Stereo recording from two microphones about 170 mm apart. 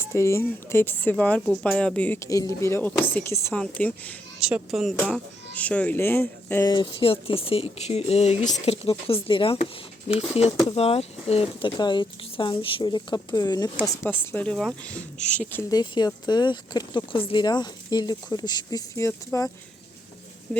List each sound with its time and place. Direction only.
0.0 s speech: 15° left (ahead or behind)
4.4 s speech: 5° right (ahead or behind)
5.0 s speech: 10° left (ahead or behind)
6.7 s speech: 30° left (ahead or behind)
13.8 s speech: 10° left (ahead or behind)
15.7 s speech: 25° left (ahead or behind)
20.5 s a sound: 5° left (ahead or behind)